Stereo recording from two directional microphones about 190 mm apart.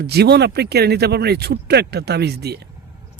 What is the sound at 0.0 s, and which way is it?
Speech, 60° right (ahead or behind).